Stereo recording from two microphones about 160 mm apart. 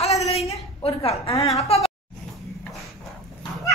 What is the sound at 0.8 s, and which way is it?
A woman's voice, 35° left (ahead or behind).